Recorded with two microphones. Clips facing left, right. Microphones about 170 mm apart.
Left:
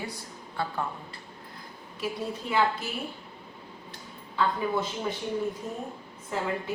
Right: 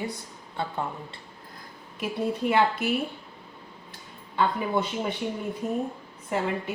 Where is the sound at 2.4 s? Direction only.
60° right (ahead or behind).